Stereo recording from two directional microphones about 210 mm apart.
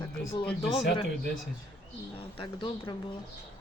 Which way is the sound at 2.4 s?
20° left (ahead or behind).